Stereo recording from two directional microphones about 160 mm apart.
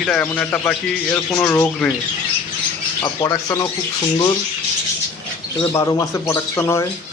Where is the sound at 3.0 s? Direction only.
20° left (ahead or behind).